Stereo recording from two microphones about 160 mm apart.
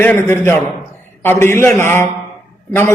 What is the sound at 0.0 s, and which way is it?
A man's voice, 15° left (ahead or behind).